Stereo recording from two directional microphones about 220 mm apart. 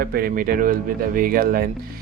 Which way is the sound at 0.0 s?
40° right (ahead or behind).